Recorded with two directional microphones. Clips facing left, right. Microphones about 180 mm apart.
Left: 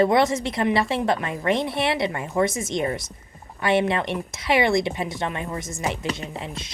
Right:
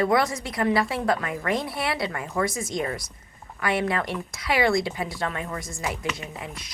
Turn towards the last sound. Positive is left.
turn(degrees=25)  # may be behind; listen again after turning